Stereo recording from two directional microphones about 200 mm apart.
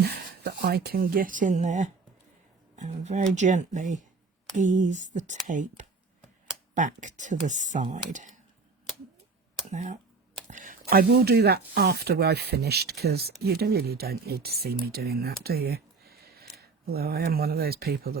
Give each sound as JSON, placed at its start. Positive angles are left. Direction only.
{"t": 0.0, "sound": "speech", "side_deg": -50}
{"t": 9.6, "sound": "speech", "side_deg": -35}